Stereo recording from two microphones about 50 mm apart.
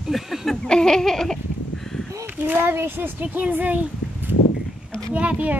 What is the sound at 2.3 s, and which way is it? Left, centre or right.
Speech, right.